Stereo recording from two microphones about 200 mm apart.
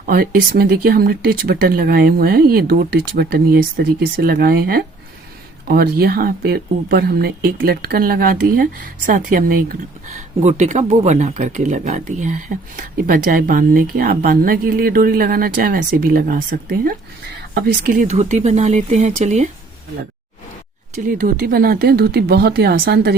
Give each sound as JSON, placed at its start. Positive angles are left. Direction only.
{"t": 0.0, "sound": "a woman's voice", "side_deg": -45}
{"t": 20.9, "sound": "a woman's voice", "side_deg": -40}